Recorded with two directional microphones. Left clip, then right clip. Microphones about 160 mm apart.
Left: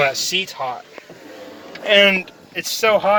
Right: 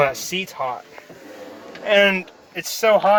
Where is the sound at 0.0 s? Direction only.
20° right (ahead or behind).